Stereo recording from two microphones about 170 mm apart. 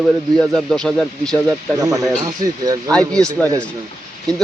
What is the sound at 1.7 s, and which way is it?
Speech, 20° right (ahead or behind).